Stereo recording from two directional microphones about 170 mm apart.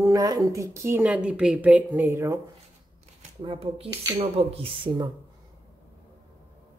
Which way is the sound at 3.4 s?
30° right (ahead or behind).